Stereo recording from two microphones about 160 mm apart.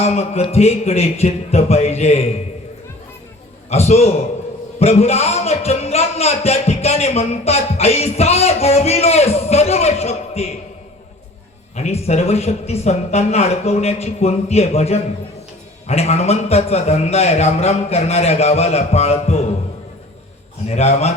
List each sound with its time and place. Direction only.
0.0 s a man's voice: 40° left (ahead or behind)
3.7 s a man's voice: 40° left (ahead or behind)
11.8 s a man's voice: 40° left (ahead or behind)
20.7 s a man's voice: 40° left (ahead or behind)